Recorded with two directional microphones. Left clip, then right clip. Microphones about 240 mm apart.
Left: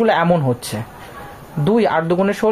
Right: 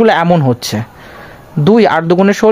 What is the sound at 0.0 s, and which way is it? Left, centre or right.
Speech, right.